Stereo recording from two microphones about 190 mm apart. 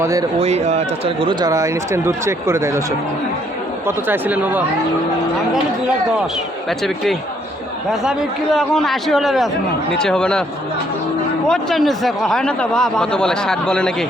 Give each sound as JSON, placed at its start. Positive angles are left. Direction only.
{"t": 0.0, "sound": "speech", "side_deg": -15}
{"t": 0.3, "sound": "speech", "side_deg": -35}
{"t": 3.8, "sound": "speech", "side_deg": -10}
{"t": 6.7, "sound": "speech", "side_deg": 0}
{"t": 8.5, "sound": "speech", "side_deg": 0}
{"t": 11.4, "sound": "speech", "side_deg": 0}